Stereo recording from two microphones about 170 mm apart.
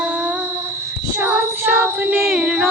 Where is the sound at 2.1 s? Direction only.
Centre (ahead or behind).